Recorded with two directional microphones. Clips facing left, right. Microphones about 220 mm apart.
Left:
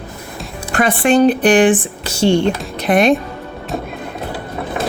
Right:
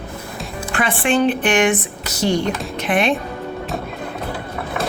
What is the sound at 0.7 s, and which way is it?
Speech, 40° left (ahead or behind).